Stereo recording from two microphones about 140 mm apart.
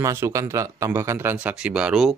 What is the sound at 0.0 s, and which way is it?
Speech, 20° right (ahead or behind).